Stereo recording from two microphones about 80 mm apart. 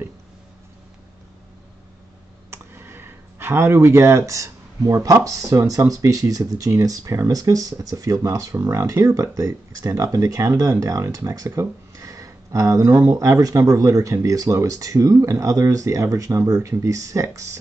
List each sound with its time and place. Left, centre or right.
2.5 s speech: right